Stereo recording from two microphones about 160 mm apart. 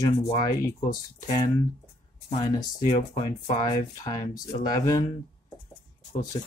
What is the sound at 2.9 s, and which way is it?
Speech, 45° left (ahead or behind).